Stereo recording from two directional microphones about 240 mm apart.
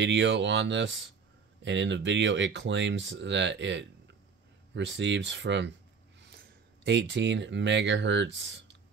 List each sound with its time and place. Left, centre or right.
0.0 s speech: right